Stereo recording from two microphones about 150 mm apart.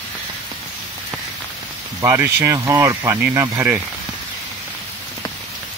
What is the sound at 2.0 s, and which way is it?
Speech, 20° right (ahead or behind).